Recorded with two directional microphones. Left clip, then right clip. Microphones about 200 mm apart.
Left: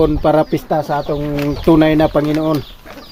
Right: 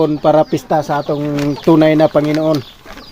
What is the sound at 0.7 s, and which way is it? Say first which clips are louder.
Speech: right 2 dB; 15° right (ahead or behind).